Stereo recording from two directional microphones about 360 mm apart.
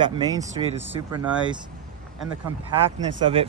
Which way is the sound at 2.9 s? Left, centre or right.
Centre.